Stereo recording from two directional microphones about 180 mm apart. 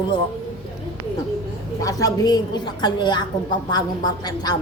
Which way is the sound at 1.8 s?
20° left (ahead or behind).